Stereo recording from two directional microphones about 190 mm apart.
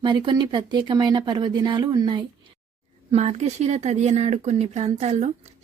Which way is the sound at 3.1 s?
35° right (ahead or behind).